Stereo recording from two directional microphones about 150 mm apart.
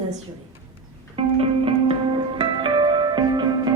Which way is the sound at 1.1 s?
40° right (ahead or behind).